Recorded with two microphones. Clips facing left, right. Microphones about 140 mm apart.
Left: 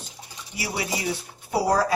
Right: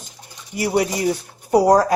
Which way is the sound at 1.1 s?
45° right (ahead or behind).